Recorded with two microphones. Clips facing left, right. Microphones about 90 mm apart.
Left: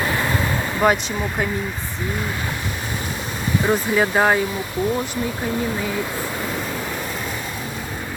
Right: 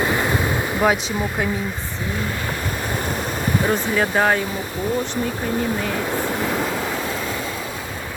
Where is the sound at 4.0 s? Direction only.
5° left (ahead or behind).